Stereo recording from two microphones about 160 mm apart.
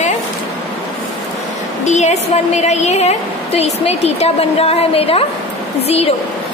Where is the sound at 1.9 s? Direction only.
45° left (ahead or behind).